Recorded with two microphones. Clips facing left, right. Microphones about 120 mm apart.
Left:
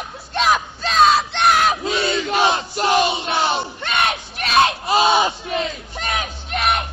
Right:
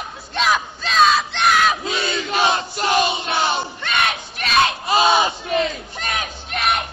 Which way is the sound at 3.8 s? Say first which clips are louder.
Left 1 dB; 20° left (ahead or behind).